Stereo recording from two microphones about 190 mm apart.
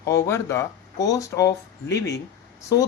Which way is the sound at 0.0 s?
15° left (ahead or behind).